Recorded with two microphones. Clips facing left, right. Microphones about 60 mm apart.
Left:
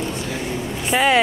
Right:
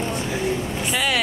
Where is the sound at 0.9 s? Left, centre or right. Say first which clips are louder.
Left 7 dB; left.